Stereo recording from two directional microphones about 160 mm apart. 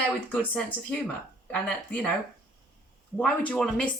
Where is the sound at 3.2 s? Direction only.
5° left (ahead or behind).